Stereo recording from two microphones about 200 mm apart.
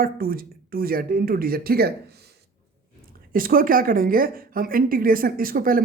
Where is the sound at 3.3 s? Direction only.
45° right (ahead or behind).